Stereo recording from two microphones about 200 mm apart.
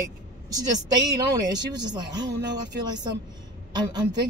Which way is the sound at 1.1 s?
20° right (ahead or behind).